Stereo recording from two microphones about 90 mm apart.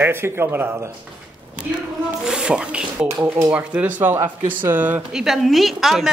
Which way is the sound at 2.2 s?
10° right (ahead or behind).